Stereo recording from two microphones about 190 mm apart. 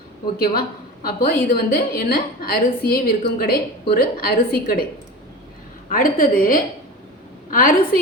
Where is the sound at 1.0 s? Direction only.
50° left (ahead or behind).